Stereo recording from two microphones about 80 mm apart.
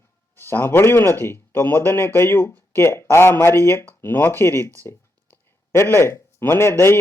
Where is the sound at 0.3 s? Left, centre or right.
Left.